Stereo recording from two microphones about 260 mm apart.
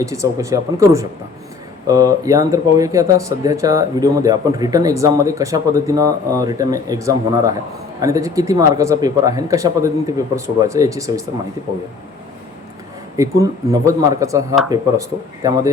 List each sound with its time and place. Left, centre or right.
0.0 s speech: centre
13.1 s speech: centre
15.4 s speech: centre